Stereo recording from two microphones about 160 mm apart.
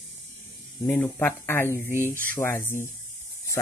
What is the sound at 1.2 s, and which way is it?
Speech, 15° left (ahead or behind).